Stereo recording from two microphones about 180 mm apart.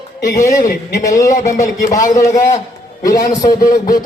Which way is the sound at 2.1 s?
20° left (ahead or behind).